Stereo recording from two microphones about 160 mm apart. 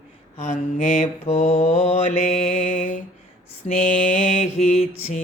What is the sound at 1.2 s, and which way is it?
Mantra, 40° left (ahead or behind).